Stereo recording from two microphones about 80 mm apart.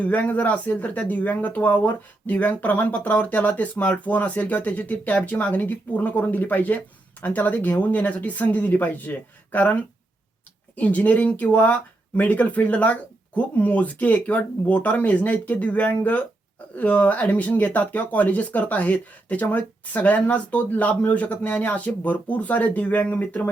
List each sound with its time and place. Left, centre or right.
0.0 s speech: centre
10.8 s speech: centre